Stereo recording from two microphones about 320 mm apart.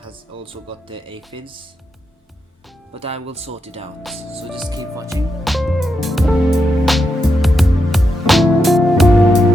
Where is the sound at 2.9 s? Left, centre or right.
Centre.